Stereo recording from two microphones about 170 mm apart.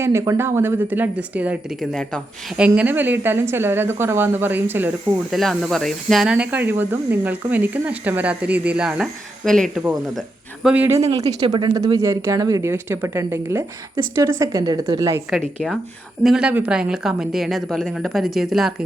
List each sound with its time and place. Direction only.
0.0 s speech: 15° right (ahead or behind)
1.9 s a woman's voice: centre (ahead or behind)
2.6 s speech: 10° right (ahead or behind)
5.3 s speech: centre (ahead or behind); by 15.2 s 20° right (ahead or behind)
16.2 s a woman's voice: 5° right (ahead or behind)